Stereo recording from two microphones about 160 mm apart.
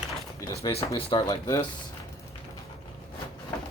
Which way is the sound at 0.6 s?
40° left (ahead or behind).